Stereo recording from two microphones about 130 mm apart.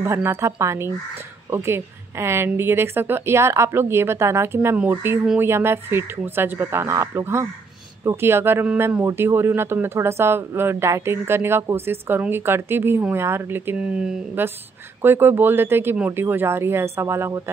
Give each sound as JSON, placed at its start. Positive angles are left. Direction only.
{"t": 0.0, "sound": "a woman's voice", "side_deg": -20}
{"t": 13.7, "sound": "speech", "side_deg": -5}